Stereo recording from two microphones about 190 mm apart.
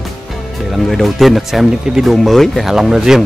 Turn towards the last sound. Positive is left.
turn(degrees=-5)  # may be behind; listen again after turning